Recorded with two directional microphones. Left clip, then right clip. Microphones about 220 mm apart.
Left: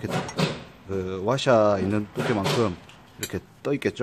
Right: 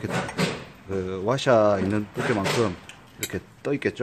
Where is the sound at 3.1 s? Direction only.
10° left (ahead or behind).